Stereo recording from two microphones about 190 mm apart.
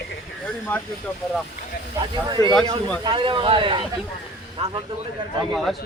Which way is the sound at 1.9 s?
25° right (ahead or behind).